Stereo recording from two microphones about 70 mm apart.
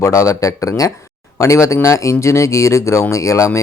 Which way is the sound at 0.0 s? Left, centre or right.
Left.